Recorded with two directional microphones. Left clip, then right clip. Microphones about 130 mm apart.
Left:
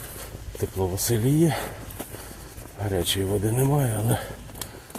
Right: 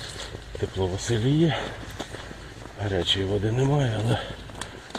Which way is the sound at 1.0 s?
30° left (ahead or behind).